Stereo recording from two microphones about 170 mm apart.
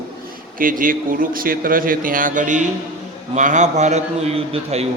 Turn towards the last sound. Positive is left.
turn(degrees=-35)  # may be behind; listen again after turning